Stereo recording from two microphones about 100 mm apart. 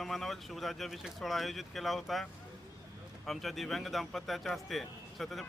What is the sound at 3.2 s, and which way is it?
Speech, centre (ahead or behind).